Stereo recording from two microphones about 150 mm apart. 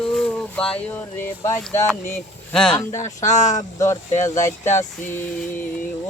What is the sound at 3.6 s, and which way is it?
Speech, 20° left (ahead or behind).